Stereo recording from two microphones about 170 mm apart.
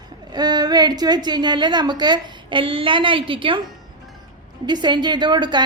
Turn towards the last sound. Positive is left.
turn(degrees=-25)  # may be behind; listen again after turning